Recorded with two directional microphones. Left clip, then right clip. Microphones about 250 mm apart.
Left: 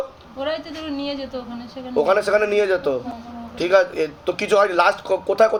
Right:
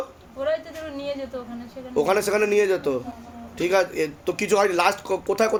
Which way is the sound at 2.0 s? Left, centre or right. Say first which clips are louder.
Left 4 dB; right.